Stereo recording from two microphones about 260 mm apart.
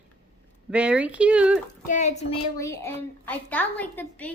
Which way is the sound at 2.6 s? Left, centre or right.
Centre.